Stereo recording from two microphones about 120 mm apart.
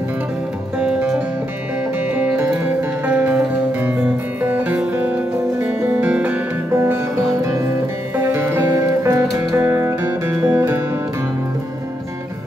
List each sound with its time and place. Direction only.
0.7 s music: 5° right (ahead or behind)
7.4 s music: 25° right (ahead or behind)